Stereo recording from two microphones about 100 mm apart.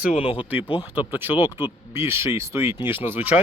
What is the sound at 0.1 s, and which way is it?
Speech, 65° left (ahead or behind).